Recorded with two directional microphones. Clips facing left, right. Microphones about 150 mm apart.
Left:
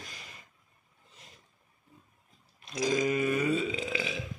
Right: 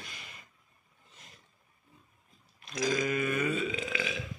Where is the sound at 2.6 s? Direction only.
30° left (ahead or behind).